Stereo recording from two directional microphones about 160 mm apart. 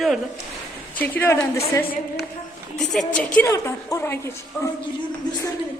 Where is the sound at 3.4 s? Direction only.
20° left (ahead or behind).